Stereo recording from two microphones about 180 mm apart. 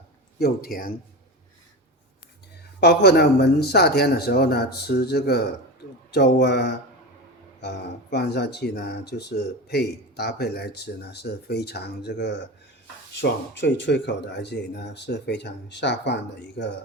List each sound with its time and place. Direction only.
0.3 s speech: 55° left (ahead or behind)
2.8 s speech: 65° left (ahead or behind)